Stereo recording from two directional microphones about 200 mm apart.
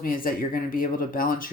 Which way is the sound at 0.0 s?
45° left (ahead or behind).